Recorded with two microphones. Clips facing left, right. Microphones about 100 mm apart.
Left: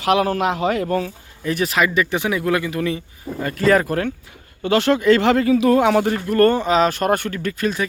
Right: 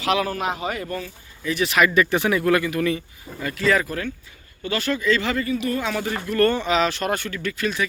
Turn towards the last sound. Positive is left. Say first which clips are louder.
# left 3 dB
turn(degrees=40)  # may be behind; listen again after turning